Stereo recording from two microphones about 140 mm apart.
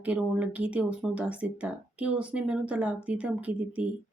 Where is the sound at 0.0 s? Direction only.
10° right (ahead or behind).